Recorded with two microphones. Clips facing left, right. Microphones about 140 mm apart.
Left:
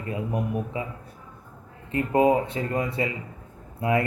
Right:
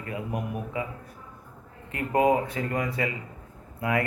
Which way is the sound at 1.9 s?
25° left (ahead or behind).